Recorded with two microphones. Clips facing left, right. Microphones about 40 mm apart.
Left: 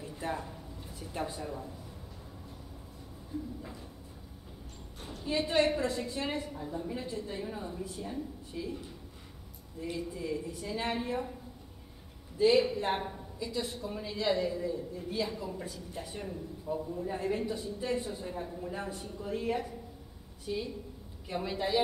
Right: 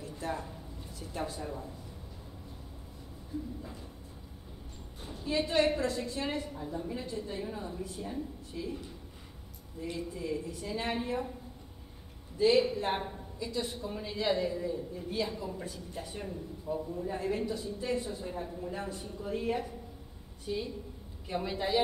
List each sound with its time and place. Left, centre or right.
0.0 s a sound: centre
1.4 s a man's voice: centre
5.2 s a woman's voice: centre
9.9 s a man's voice: centre
12.4 s a man's voice: centre